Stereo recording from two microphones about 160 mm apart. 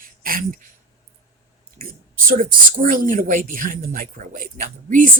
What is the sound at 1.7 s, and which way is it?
Speech, 65° right (ahead or behind).